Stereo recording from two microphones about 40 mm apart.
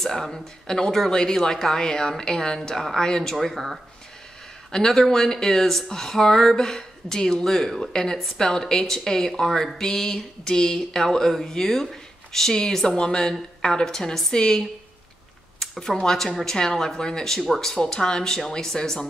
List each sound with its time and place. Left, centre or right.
0.0 s speech: centre
3.3 s speech: centre
4.7 s speech: centre
15.7 s speech: centre
16.0 s speech: centre